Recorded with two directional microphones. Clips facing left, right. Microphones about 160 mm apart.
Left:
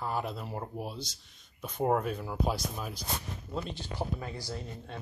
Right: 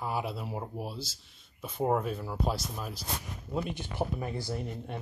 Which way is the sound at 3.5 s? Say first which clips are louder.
Right 4 dB; 10° right (ahead or behind).